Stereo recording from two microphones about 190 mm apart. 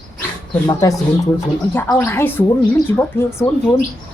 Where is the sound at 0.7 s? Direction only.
20° left (ahead or behind).